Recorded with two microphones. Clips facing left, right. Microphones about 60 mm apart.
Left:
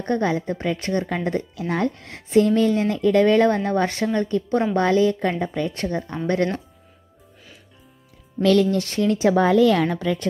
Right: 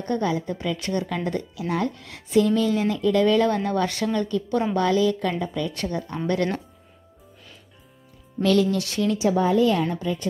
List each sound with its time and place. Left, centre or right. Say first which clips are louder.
0.0 s speech: left 3 dB; left
8.4 s speech: left 3 dB; left